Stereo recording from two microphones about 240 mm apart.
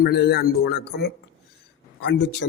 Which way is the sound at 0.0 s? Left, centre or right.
Left.